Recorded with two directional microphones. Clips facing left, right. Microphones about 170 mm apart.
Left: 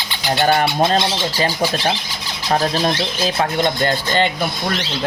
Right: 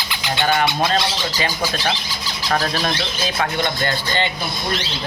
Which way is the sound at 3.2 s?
35° left (ahead or behind).